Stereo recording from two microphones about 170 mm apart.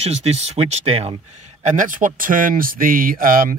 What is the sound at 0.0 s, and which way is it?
Speech, 40° right (ahead or behind).